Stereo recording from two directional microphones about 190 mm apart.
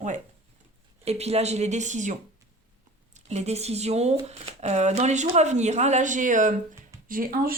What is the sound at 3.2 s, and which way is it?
Speech, 35° right (ahead or behind).